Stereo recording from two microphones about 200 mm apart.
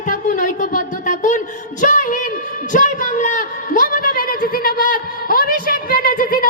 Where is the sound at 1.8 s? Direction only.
40° left (ahead or behind).